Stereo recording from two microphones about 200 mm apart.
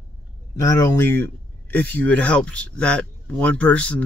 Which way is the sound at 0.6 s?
15° left (ahead or behind).